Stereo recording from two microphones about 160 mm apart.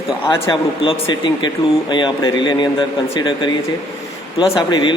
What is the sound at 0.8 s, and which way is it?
A man's voice, 30° left (ahead or behind).